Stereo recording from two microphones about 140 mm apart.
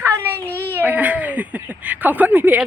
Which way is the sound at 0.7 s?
10° right (ahead or behind).